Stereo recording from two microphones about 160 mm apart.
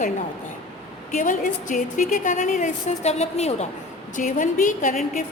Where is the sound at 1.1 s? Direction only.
55° left (ahead or behind).